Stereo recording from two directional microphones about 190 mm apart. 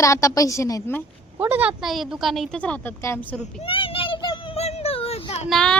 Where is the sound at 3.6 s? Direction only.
30° left (ahead or behind).